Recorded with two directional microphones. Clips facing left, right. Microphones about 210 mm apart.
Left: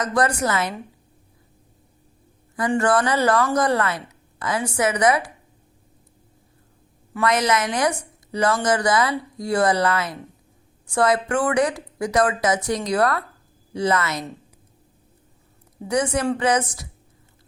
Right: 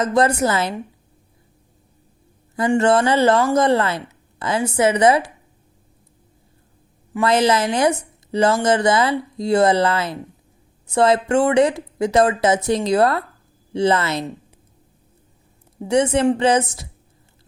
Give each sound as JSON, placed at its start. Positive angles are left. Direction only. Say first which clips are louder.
{"t": 0.0, "sound": "speech", "louder": "right 4 dB", "side_deg": -25}
{"t": 2.6, "sound": "speech", "louder": "right 4 dB", "side_deg": -25}
{"t": 7.2, "sound": "speech", "louder": "right 4 dB", "side_deg": -30}
{"t": 15.9, "sound": "speech", "louder": "right 5 dB", "side_deg": -25}